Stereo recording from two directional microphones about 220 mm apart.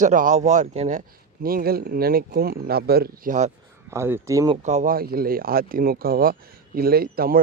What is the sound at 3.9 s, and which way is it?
Speech, 10° right (ahead or behind).